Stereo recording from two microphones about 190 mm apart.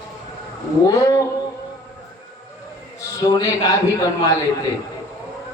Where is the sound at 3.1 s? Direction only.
20° left (ahead or behind).